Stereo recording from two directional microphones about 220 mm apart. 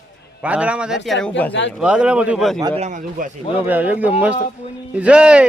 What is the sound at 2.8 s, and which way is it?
Speech, 35° right (ahead or behind).